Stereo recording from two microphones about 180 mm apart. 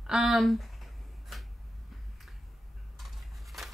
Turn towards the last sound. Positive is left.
turn(degrees=0)  # may be behind; listen again after turning